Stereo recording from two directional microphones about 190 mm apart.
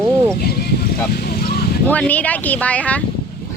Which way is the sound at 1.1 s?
55° left (ahead or behind).